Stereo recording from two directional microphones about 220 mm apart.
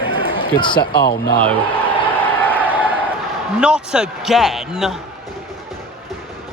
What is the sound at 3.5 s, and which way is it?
Basketball bounce, 5° right (ahead or behind).